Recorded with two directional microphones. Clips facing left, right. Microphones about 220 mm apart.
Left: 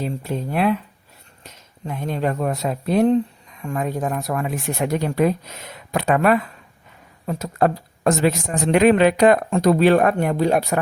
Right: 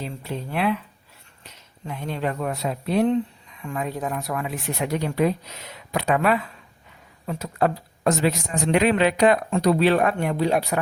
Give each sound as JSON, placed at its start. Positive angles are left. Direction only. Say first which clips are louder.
{"t": 0.0, "sound": "speech", "louder": "left 6 dB", "side_deg": 45}